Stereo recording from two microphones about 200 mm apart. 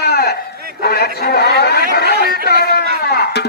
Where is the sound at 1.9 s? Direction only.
55° left (ahead or behind).